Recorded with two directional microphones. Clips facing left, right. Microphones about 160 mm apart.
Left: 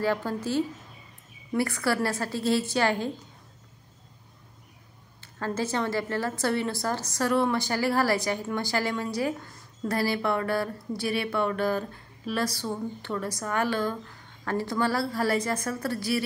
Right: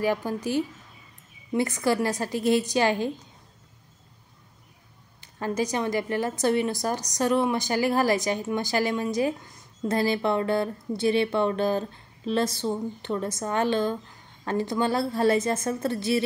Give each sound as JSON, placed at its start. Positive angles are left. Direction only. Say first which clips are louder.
{"t": 0.0, "sound": "a woman's voice", "louder": "right 1 dB", "side_deg": -15}
{"t": 5.2, "sound": "a woman's voice", "louder": "right 3 dB", "side_deg": -15}